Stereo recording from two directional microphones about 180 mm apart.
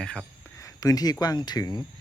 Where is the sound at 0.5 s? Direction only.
20° left (ahead or behind).